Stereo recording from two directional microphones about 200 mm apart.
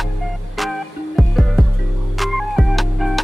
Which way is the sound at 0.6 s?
Centre (ahead or behind).